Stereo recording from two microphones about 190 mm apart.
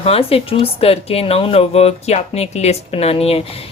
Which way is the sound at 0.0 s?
30° left (ahead or behind).